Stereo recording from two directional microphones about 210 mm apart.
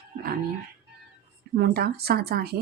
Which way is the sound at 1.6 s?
50° right (ahead or behind).